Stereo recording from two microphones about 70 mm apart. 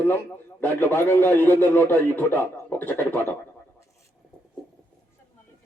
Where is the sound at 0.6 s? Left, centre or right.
Left.